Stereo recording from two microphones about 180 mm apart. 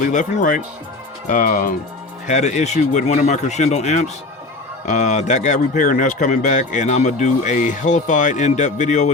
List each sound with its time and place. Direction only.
0.1 s speech: 45° left (ahead or behind)